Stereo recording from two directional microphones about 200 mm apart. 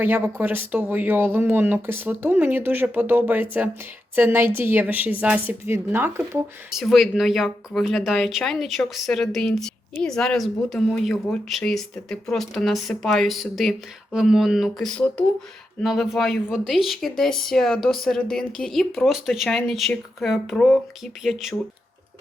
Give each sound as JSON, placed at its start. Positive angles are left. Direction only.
{"t": 0.0, "sound": "a woman's voice", "side_deg": -10}